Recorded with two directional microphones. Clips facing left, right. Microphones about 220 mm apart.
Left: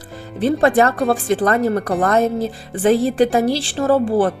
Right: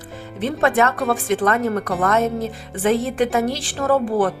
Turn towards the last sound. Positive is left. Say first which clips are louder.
# left 3 dB
turn(degrees=30)  # may be behind; listen again after turning